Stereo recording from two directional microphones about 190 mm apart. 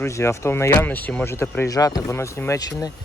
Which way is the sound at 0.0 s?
15° left (ahead or behind).